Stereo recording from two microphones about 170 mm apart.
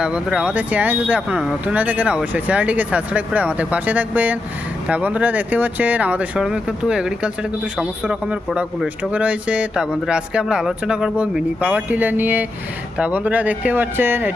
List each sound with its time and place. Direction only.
0.0 s a man's voice: 5° right (ahead or behind)